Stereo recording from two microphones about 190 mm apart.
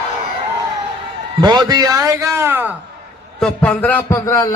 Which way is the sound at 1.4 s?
20° right (ahead or behind).